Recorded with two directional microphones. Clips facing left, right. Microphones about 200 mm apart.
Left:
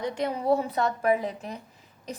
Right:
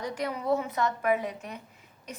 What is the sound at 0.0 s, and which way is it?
A woman's voice, 25° left (ahead or behind).